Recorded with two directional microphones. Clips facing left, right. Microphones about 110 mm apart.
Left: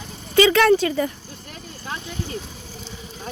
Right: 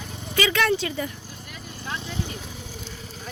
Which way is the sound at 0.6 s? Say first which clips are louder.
Left 7 dB; 45° left (ahead or behind).